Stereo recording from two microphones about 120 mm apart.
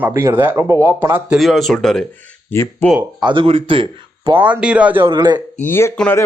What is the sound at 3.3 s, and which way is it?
Speech, 45° right (ahead or behind).